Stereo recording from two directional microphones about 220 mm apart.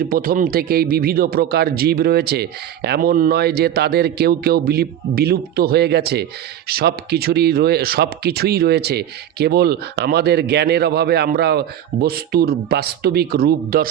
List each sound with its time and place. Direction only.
0.0 s speech: 40° right (ahead or behind)